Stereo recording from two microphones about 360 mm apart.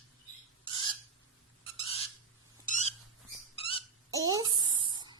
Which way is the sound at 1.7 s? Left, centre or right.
Centre.